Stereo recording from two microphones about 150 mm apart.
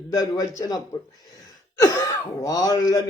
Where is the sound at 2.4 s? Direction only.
25° left (ahead or behind).